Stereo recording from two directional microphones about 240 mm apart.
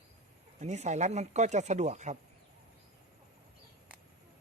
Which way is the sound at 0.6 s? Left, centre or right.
Right.